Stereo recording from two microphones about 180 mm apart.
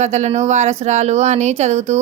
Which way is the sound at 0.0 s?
40° right (ahead or behind).